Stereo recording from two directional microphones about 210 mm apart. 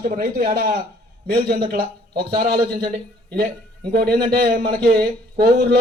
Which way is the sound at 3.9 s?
45° right (ahead or behind).